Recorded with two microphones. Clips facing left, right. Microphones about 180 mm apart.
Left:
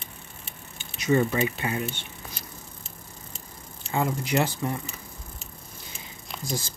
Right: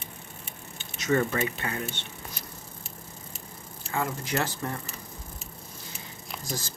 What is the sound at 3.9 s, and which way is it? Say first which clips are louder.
Speech: left 4 dB; 20° left (ahead or behind).